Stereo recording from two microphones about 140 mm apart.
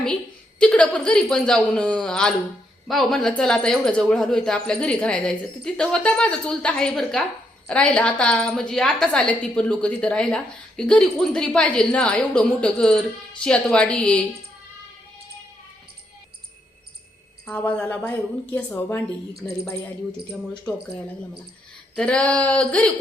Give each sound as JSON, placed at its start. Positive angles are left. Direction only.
{"t": 0.6, "sound": "a woman's voice", "side_deg": 5}
{"t": 17.4, "sound": "a woman's voice", "side_deg": 10}
{"t": 21.9, "sound": "a woman's voice", "side_deg": 5}